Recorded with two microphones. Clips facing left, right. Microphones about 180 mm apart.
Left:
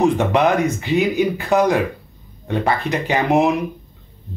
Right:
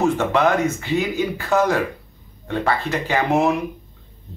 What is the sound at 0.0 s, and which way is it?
Speech, 15° left (ahead or behind).